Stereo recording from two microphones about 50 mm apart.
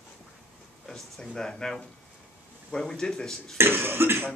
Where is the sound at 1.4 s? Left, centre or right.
Centre.